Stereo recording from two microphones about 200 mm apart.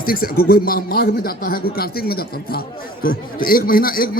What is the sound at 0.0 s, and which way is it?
A man's voice, 45° left (ahead or behind).